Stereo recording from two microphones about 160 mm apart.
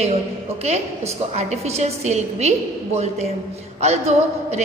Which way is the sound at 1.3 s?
45° right (ahead or behind).